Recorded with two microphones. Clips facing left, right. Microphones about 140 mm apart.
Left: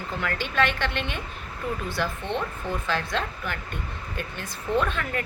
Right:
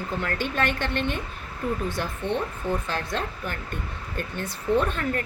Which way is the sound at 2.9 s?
45° right (ahead or behind).